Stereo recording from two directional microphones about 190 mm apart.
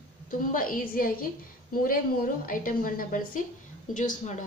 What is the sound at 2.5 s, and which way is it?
A woman's voice, 45° left (ahead or behind).